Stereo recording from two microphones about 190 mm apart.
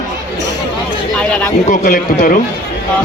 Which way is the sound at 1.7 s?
45° left (ahead or behind).